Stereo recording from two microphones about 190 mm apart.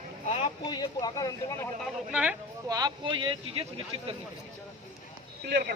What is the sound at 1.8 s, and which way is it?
Speech, 5° right (ahead or behind).